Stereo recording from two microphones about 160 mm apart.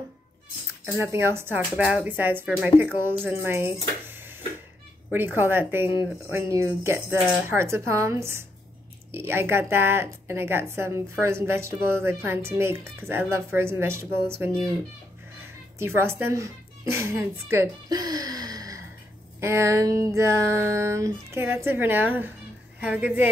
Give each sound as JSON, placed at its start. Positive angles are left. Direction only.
{"t": 0.9, "sound": "a woman's voice", "side_deg": -15}
{"t": 15.4, "sound": "a woman's voice", "side_deg": -15}